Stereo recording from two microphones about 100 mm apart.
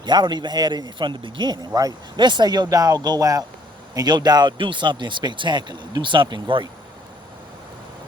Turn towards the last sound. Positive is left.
turn(degrees=-55)  # may be behind; listen again after turning